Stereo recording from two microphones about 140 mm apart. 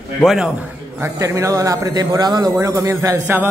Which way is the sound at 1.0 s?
20° right (ahead or behind).